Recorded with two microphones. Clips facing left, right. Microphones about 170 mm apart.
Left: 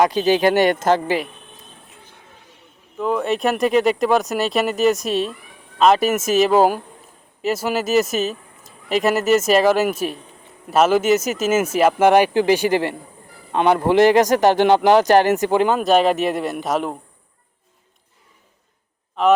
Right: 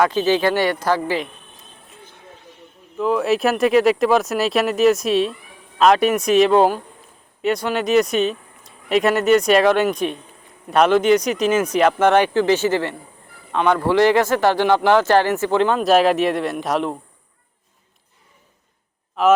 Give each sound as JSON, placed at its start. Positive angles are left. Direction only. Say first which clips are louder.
{"t": 0.4, "sound": "a man's voice", "louder": "left 3 dB", "side_deg": 20}
{"t": 3.0, "sound": "speech", "louder": "right 2 dB", "side_deg": 0}